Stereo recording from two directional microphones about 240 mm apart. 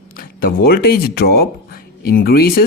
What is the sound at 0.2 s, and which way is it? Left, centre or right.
Speech, left.